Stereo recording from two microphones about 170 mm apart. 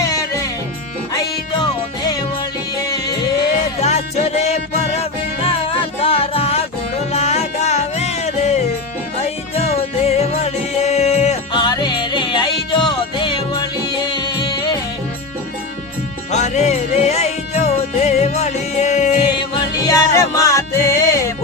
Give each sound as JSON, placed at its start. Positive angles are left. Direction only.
{"t": 0.0, "sound": "music", "side_deg": 20}
{"t": 3.8, "sound": "music", "side_deg": 40}
{"t": 11.5, "sound": "music", "side_deg": 25}
{"t": 16.3, "sound": "music", "side_deg": 40}
{"t": 19.4, "sound": "music", "side_deg": 20}